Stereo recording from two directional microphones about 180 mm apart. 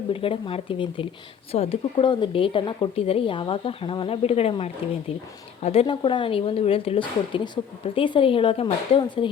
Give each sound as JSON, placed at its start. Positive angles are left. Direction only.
{"t": 0.1, "sound": "a woman's voice", "side_deg": 30}